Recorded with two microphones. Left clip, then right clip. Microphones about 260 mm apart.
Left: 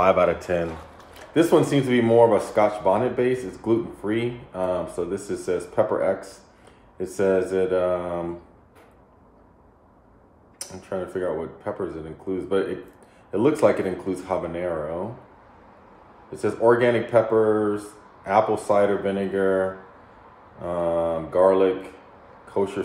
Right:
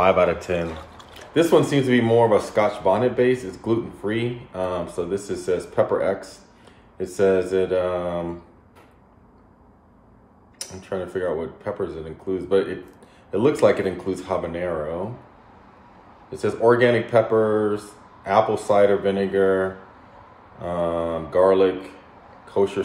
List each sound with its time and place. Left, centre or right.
0.0 s speech: centre
10.6 s speech: centre
16.3 s speech: centre